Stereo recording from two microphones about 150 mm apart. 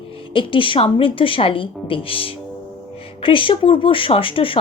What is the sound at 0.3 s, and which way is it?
Speech, 35° left (ahead or behind).